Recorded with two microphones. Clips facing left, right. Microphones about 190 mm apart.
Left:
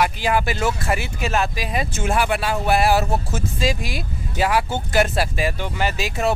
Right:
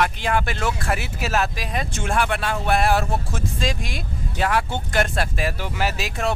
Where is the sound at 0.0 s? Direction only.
5° left (ahead or behind).